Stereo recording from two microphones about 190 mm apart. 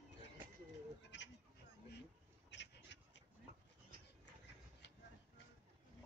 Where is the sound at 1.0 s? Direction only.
70° left (ahead or behind).